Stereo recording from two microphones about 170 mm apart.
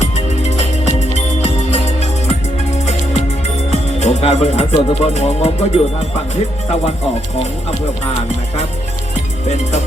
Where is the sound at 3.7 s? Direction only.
40° left (ahead or behind).